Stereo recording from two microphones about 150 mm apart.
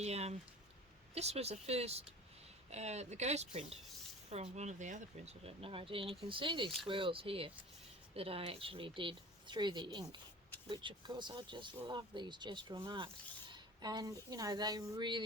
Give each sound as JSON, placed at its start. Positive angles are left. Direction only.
{"t": 0.0, "sound": "a woman's voice", "side_deg": -45}